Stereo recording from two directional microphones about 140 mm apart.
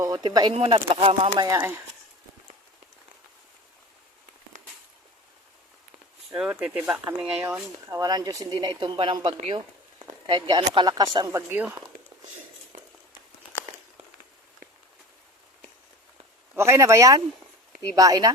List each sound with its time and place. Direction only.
0.2 s speech: 35° right (ahead or behind)
1.4 s speech: 20° right (ahead or behind)
6.3 s speech: 5° right (ahead or behind)
7.9 s speech: 25° right (ahead or behind)
11.3 s speech: 20° right (ahead or behind)
16.6 s speech: 20° right (ahead or behind)